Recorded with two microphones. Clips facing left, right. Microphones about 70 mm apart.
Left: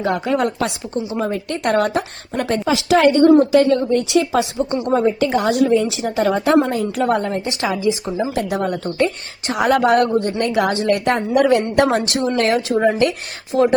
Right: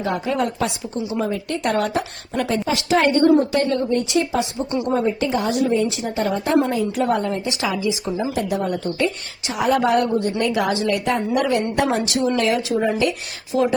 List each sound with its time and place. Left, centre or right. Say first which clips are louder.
0.0 s a woman's voice: left 3 dB; left
2.9 s a woman's voice: left 4 dB; left
4.9 s a woman's voice: left 4 dB; left
6.7 s a woman's voice: left 2 dB; left
8.4 s a woman's voice: left 2 dB; left
8.8 s a woman's voice: left 3 dB; left
11.9 s a woman's voice: left 2 dB; left